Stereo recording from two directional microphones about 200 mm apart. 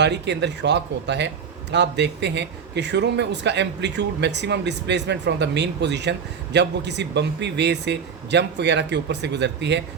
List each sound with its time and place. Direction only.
0.0 s a man's voice: 60° right (ahead or behind)